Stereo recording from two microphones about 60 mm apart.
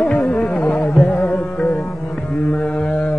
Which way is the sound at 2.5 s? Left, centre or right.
Left.